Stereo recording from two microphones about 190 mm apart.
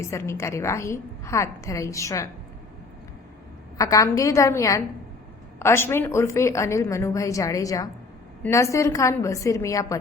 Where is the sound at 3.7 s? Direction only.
20° left (ahead or behind).